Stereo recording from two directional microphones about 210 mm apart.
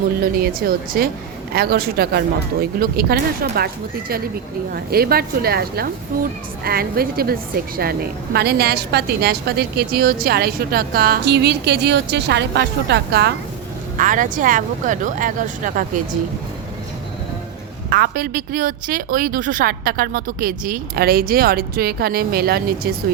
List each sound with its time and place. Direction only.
0.2 s a woman's voice: 45° right (ahead or behind)
4.7 s a woman's voice: 45° right (ahead or behind)
14.0 s speech: 40° right (ahead or behind)
17.8 s a woman's voice: 45° right (ahead or behind)